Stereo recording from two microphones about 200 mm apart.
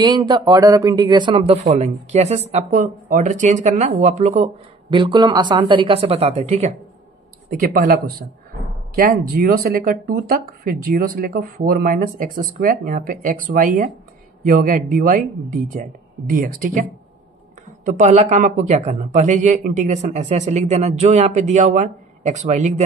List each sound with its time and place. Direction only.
0.0 s speech: 20° right (ahead or behind)
7.4 s speech: 45° right (ahead or behind)
17.8 s speech: 40° right (ahead or behind)